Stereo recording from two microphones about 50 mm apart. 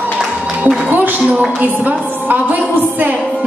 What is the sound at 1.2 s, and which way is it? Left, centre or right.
Speech, right.